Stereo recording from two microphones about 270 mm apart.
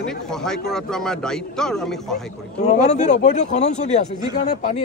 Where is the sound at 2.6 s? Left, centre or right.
Left.